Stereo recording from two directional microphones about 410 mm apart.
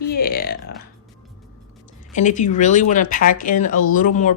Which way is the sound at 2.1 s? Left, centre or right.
Centre.